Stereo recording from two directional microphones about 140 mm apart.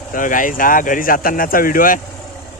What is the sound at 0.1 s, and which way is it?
Speech, 70° left (ahead or behind).